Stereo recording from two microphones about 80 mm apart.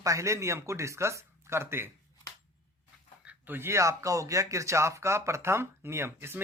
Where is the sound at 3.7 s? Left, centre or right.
Right.